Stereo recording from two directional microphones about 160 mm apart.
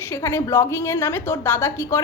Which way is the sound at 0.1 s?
15° left (ahead or behind).